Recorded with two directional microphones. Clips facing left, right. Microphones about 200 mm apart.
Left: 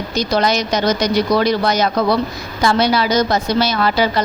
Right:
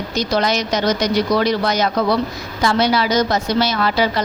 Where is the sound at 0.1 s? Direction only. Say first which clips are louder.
Left 2 dB; 35° left (ahead or behind).